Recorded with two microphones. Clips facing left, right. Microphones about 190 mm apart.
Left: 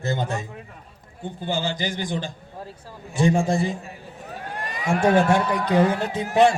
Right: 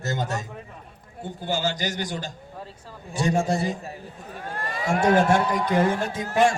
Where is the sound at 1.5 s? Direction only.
40° right (ahead or behind).